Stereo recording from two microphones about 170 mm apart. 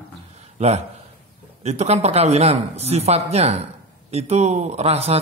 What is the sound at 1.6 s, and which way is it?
Speech, 40° right (ahead or behind).